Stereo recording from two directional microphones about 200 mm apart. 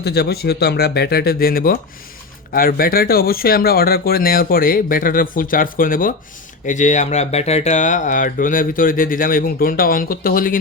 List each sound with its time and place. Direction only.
0.0 s speech: 55° left (ahead or behind)